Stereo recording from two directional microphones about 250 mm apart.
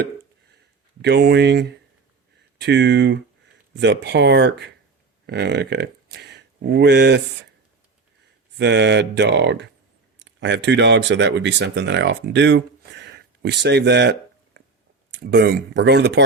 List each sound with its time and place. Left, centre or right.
1.0 s speech: right
8.5 s speech: right